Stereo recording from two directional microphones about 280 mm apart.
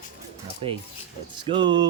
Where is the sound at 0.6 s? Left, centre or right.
Centre.